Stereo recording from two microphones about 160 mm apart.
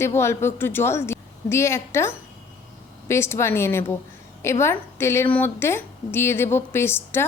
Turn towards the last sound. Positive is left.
turn(degrees=15)  # may be behind; listen again after turning